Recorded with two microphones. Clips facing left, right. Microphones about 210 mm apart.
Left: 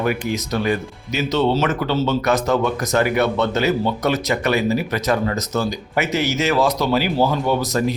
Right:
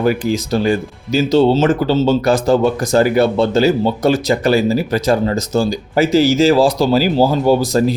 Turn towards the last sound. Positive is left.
turn(degrees=-30)  # may be behind; listen again after turning